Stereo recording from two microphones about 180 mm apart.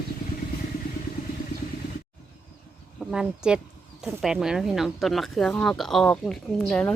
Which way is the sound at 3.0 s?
5° right (ahead or behind).